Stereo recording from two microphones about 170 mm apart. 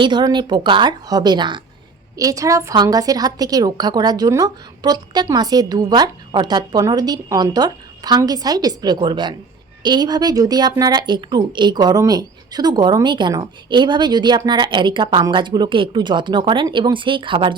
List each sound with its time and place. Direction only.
0.0 s speech: 25° right (ahead or behind)